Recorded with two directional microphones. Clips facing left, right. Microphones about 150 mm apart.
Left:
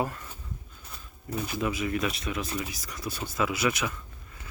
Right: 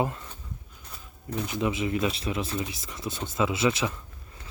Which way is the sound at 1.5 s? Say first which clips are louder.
Right 2 dB; 20° right (ahead or behind).